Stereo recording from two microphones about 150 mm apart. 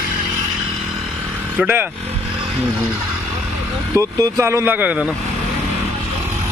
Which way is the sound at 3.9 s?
20° right (ahead or behind).